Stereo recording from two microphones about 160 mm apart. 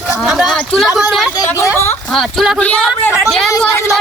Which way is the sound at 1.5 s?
15° left (ahead or behind).